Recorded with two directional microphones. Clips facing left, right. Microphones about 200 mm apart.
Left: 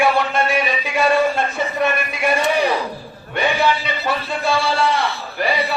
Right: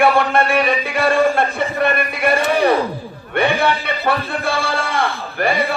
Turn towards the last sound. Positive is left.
turn(degrees=-50)  # may be behind; listen again after turning